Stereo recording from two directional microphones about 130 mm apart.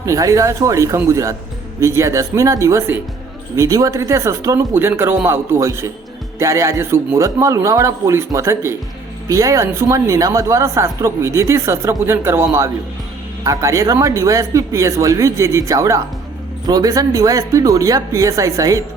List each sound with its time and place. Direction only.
0.0 s speech: 25° right (ahead or behind)